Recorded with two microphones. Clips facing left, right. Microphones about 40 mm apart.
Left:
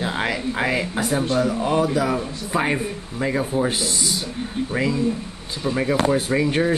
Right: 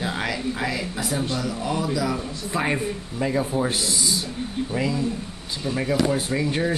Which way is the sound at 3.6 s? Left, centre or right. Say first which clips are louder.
Left 2 dB; left.